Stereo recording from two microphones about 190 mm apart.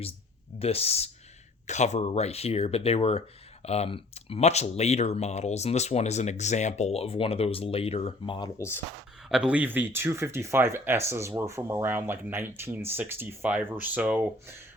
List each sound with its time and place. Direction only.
0.6 s speech: 30° left (ahead or behind); by 8.8 s 15° left (ahead or behind)
9.3 s speech: 5° right (ahead or behind)